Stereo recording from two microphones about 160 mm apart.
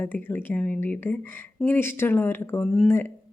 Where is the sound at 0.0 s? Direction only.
10° left (ahead or behind).